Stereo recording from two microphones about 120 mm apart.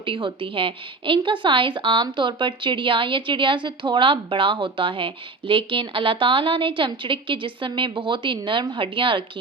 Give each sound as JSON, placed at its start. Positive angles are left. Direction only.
{"t": 0.0, "sound": "a woman's voice", "side_deg": -45}